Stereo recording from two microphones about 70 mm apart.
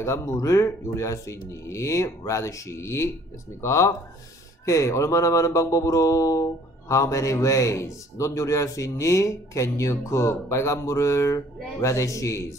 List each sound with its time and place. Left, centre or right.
0.0 s speech: left